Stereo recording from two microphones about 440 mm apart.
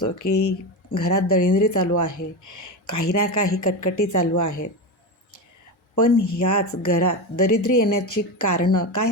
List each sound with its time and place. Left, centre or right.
0.0 s speech: left
6.0 s speech: left